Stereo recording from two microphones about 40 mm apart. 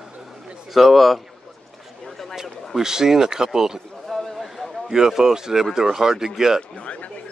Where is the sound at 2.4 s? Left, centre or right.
Centre.